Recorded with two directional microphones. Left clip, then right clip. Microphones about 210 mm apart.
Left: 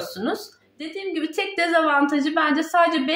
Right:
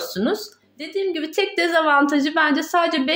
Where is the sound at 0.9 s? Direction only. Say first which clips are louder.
Right 4 dB; 45° right (ahead or behind).